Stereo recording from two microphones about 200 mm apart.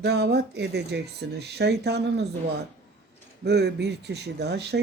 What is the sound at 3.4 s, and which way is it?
Speech, 55° right (ahead or behind).